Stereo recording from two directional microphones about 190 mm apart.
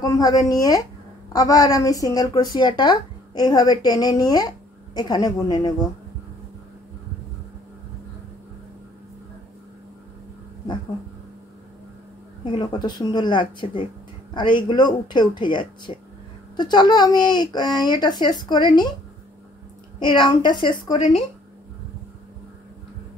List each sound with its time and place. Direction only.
0.0 s a woman's voice: 20° left (ahead or behind)
12.4 s a woman's voice: 25° left (ahead or behind)
20.0 s a woman's voice: 25° left (ahead or behind)